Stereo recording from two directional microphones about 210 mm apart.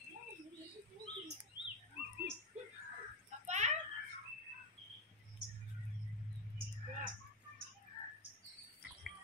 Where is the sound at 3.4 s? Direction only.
35° right (ahead or behind).